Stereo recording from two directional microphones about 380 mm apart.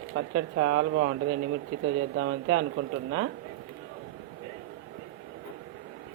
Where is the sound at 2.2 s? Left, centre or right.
Right.